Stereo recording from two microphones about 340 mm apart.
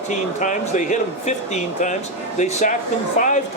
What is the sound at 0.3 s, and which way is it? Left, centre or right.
Speech, left.